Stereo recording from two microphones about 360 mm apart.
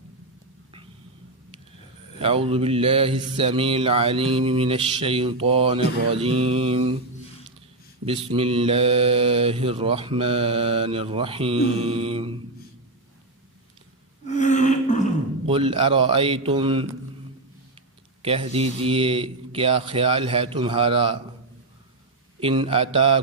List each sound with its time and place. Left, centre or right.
2.2 s mantra: centre
8.0 s mantra: centre
14.3 s a sound: centre
15.4 s mantra: centre
18.2 s mantra: centre
22.4 s mantra: centre